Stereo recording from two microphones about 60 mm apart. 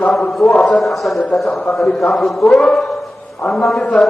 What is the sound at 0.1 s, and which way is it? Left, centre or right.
A man's voice, centre.